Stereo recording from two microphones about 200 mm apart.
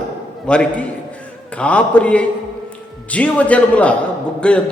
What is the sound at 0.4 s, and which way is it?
A man's voice, 5° left (ahead or behind).